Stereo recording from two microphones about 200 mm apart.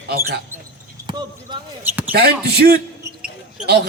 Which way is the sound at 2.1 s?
50° right (ahead or behind).